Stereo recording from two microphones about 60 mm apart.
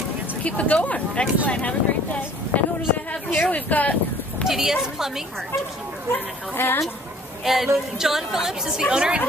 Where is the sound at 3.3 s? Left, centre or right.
Left.